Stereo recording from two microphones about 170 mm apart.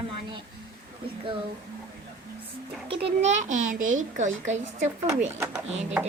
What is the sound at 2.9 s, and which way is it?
A child's voice, 45° right (ahead or behind).